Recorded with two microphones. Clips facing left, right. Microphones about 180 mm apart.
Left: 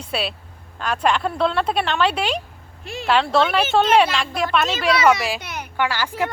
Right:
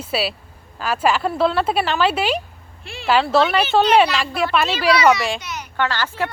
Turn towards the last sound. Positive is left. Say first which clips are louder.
# even
turn(degrees=15)  # may be behind; listen again after turning